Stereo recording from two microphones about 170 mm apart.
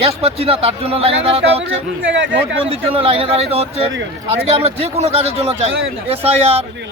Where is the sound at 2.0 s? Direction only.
90° right.